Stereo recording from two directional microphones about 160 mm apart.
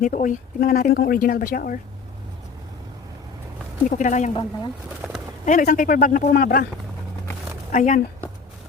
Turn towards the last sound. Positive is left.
turn(degrees=50)  # may be behind; listen again after turning